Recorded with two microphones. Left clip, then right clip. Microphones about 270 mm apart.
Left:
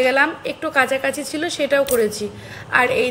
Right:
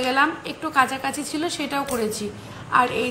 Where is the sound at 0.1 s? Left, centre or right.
Right.